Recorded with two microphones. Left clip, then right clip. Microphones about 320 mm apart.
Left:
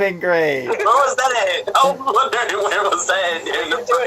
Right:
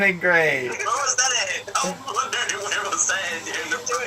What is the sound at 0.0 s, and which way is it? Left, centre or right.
Speech, left.